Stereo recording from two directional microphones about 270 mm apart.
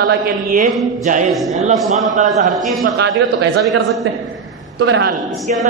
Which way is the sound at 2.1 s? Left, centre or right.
Right.